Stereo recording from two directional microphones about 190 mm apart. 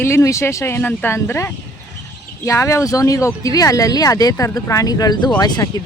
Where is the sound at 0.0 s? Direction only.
15° left (ahead or behind).